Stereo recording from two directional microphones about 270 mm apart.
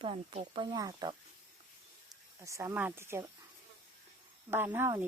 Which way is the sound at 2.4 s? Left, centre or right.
Centre.